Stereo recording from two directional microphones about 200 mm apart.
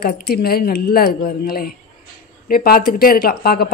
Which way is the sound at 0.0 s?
50° left (ahead or behind).